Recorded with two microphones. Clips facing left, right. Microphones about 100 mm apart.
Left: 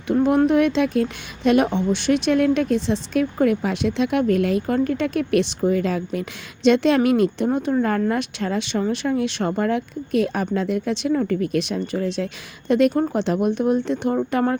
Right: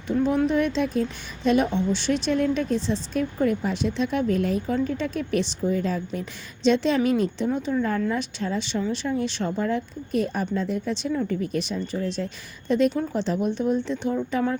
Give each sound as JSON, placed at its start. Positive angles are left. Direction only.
{"t": 0.1, "sound": "a woman's voice", "side_deg": 65}
{"t": 12.9, "sound": "speech", "side_deg": 55}